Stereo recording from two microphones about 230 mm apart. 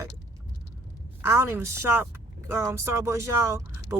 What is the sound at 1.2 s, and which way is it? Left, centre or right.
Speech, centre.